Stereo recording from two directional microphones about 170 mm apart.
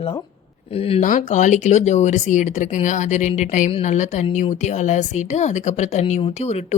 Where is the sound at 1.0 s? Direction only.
45° left (ahead or behind).